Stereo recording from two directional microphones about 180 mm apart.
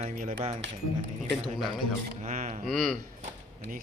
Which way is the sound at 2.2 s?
40° right (ahead or behind).